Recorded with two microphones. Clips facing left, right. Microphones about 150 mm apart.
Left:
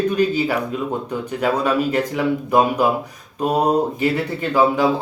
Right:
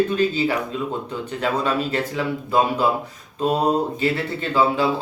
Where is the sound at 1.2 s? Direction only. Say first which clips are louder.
Left 3 dB; 10° left (ahead or behind).